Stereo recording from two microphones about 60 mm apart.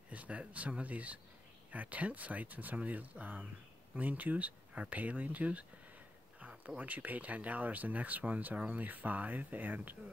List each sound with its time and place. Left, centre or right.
0.1 s speech: right
6.8 s speech: right